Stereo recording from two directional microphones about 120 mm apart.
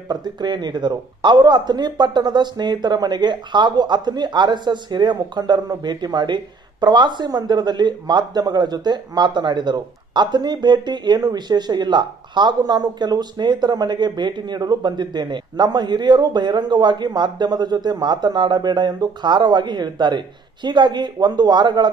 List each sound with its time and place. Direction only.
0.1 s speech: 35° right (ahead or behind)